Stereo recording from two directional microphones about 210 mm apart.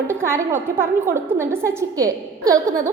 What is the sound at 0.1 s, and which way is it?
A woman's voice, 10° right (ahead or behind).